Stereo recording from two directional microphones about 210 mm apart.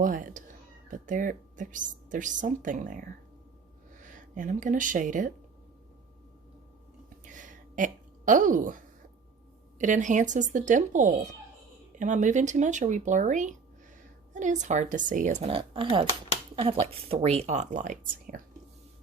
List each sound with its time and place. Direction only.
0.0 s a woman's voice: 40° right (ahead or behind)
7.3 s a sound: 40° right (ahead or behind)
9.7 s a woman's voice: 35° right (ahead or behind)